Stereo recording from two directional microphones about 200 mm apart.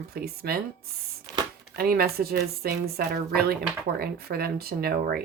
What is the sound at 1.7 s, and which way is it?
A woman's voice, 50° right (ahead or behind).